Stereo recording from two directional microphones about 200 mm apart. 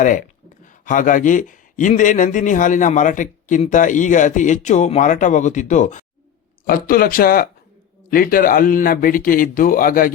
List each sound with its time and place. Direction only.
0.6 s speech: 40° left (ahead or behind)